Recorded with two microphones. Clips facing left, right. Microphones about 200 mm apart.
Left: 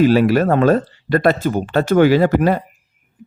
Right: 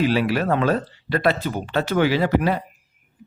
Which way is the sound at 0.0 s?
45° left (ahead or behind).